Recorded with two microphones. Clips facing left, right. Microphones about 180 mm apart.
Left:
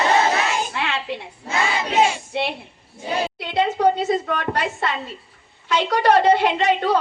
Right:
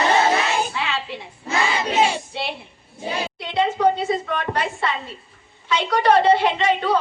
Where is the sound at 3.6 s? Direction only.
40° left (ahead or behind).